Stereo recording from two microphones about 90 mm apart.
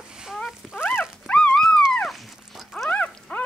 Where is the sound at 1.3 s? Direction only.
10° left (ahead or behind).